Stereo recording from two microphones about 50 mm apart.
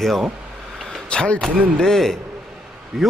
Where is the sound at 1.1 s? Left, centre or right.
Centre.